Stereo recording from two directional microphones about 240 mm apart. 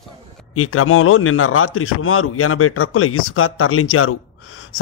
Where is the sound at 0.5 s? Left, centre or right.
Left.